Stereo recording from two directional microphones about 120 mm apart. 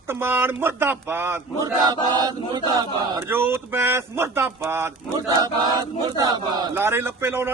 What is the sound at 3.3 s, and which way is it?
A man's voice, 20° right (ahead or behind).